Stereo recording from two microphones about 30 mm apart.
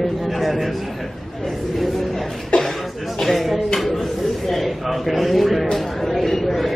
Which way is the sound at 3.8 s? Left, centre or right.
Centre.